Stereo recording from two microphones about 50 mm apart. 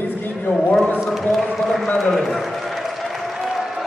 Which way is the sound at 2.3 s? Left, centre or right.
Centre.